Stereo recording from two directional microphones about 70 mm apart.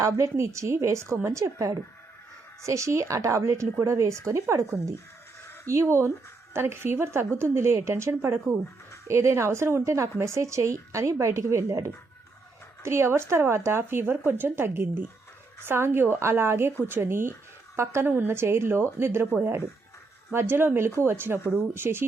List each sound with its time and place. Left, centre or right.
0.0 s speech: right